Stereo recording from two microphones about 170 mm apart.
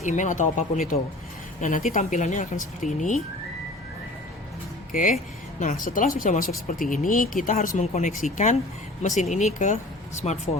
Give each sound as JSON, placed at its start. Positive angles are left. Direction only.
{"t": 0.0, "sound": "speech", "side_deg": 45}
{"t": 4.9, "sound": "speech", "side_deg": 50}